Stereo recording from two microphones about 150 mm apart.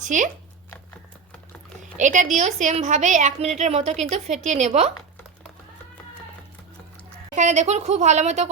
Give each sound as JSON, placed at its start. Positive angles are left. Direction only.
{"t": 0.0, "sound": "speech", "side_deg": -55}
{"t": 1.8, "sound": "a sound", "side_deg": -55}
{"t": 2.3, "sound": "a woman's voice", "side_deg": -55}
{"t": 7.3, "sound": "a woman's voice", "side_deg": -55}